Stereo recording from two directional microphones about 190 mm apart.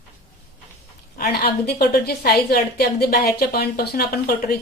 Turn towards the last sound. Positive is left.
turn(degrees=55)  # may be behind; listen again after turning